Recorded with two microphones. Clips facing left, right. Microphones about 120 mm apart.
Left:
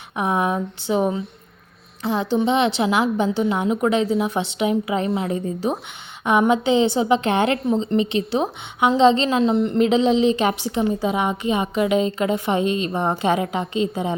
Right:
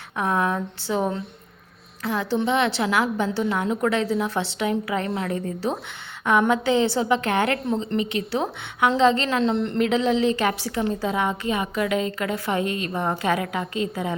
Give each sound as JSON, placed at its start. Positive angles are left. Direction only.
{"t": 0.2, "sound": "a woman's voice", "side_deg": 15}